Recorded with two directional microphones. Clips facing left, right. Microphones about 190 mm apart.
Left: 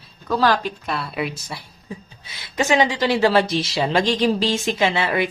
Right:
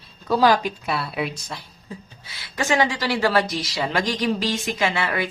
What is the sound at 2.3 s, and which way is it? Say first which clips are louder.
Speech: left 3 dB; 20° left (ahead or behind).